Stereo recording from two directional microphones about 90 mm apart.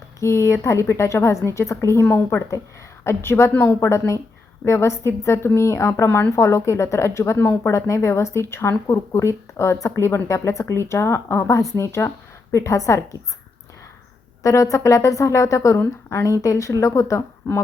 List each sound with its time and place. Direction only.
0.2 s a woman's voice: 35° left (ahead or behind)
6.1 s a woman's voice: 20° left (ahead or behind)
6.3 s a woman's voice: 35° left (ahead or behind)
14.4 s a woman's voice: 35° left (ahead or behind)